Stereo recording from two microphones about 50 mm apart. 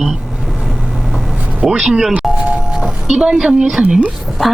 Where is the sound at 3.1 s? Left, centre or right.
Centre.